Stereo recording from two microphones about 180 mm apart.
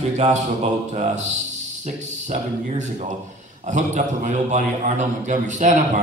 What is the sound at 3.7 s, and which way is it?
A man's voice, 45° right (ahead or behind).